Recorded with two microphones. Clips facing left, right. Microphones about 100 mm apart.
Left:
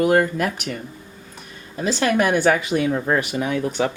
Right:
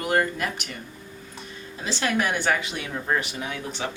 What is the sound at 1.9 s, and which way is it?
Speech, 45° left (ahead or behind).